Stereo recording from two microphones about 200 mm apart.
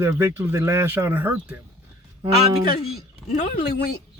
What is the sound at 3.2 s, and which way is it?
Speech, 35° left (ahead or behind).